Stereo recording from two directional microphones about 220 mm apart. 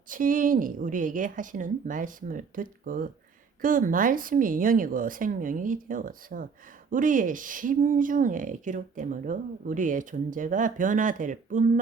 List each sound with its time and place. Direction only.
0.1 s speech: 40° right (ahead or behind)